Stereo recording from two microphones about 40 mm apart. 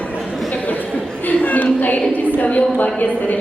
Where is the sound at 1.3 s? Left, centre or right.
Left.